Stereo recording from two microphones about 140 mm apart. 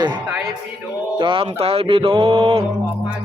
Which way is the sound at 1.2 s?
40° right (ahead or behind).